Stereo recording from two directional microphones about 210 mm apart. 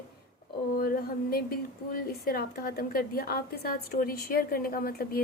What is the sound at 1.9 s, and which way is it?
A woman's voice, 45° left (ahead or behind).